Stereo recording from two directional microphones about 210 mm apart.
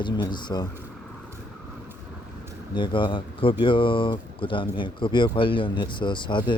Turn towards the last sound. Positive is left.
turn(degrees=20)  # may be behind; listen again after turning